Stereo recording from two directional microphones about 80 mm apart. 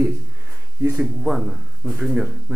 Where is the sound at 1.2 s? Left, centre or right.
Centre.